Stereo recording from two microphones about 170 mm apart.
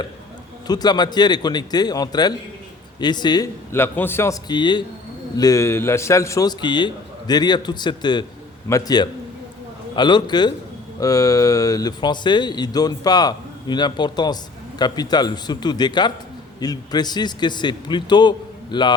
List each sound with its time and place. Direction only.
0.7 s speech: 25° left (ahead or behind)
3.7 s a man's voice: 15° left (ahead or behind)
4.4 s speech: 25° left (ahead or behind)